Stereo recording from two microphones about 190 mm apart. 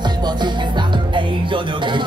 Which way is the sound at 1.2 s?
25° right (ahead or behind).